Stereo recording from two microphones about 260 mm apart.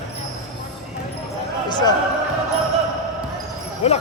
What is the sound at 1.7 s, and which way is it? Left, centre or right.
Speech, centre.